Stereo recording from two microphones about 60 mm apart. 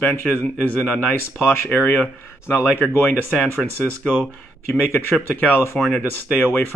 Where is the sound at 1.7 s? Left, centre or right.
Left.